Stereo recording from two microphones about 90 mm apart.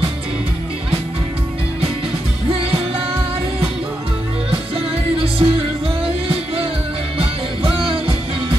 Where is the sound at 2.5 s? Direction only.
90° right.